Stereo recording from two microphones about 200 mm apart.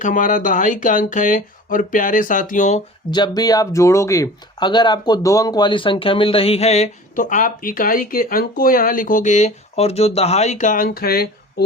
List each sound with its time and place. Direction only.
0.0 s speech: 40° left (ahead or behind)
3.1 s speech: 20° left (ahead or behind); by 11.3 s 50° left (ahead or behind)